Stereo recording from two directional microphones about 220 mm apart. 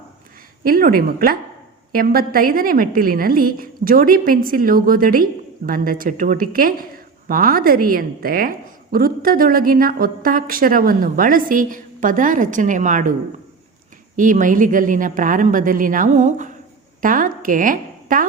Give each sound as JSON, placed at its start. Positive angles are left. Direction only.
{"t": 0.6, "sound": "a woman's voice", "side_deg": -40}
{"t": 14.2, "sound": "a woman's voice", "side_deg": -35}